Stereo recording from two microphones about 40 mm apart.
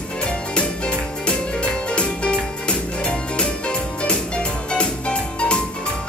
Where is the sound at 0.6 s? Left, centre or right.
Left.